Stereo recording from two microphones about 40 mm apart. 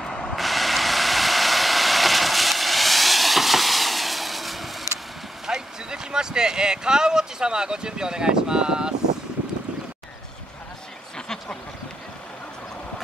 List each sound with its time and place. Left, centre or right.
0.0 s vehicle: centre
0.4 s vehicle: centre
5.5 s a sound: centre